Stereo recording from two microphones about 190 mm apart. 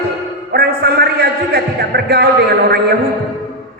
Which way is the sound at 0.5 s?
55° right (ahead or behind).